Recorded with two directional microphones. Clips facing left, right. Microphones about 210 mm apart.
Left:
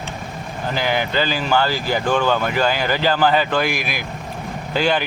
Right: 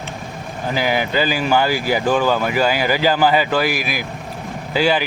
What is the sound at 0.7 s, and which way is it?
Speech, 10° right (ahead or behind).